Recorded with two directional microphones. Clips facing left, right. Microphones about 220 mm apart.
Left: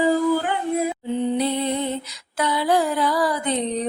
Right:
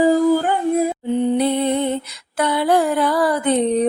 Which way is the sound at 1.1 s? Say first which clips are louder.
Right 5 dB; 55° right (ahead or behind).